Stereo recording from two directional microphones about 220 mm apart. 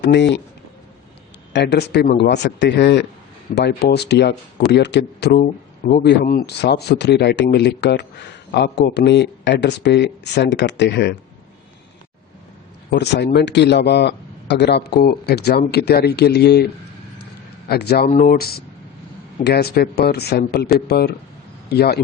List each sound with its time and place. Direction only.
0.0 s speech: 50° left (ahead or behind)
1.5 s speech: 50° left (ahead or behind)
12.9 s speech: 50° left (ahead or behind)